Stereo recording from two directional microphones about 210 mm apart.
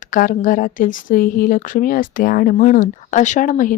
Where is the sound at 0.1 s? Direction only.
40° left (ahead or behind).